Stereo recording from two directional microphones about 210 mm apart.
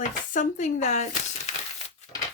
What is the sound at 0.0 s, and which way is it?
Speech, 35° left (ahead or behind).